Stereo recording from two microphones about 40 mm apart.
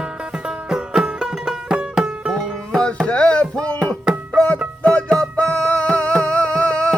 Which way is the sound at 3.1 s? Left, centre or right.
Left.